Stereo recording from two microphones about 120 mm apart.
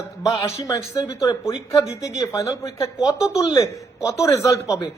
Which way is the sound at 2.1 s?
30° left (ahead or behind).